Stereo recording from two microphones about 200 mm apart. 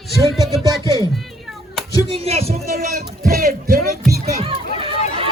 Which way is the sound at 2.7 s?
45° right (ahead or behind).